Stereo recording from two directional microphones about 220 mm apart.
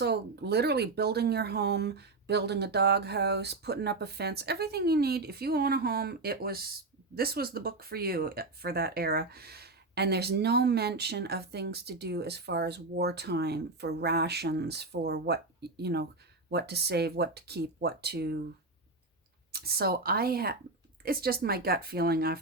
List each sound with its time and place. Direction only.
0.0 s speech: 50° right (ahead or behind)
19.5 s speech: 45° right (ahead or behind)